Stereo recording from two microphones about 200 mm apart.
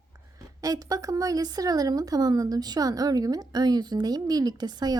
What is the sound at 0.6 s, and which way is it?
Speech, 15° right (ahead or behind).